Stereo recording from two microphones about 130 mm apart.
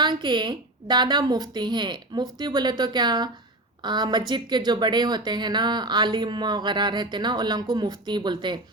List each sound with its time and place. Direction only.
0.0 s speech: 35° right (ahead or behind)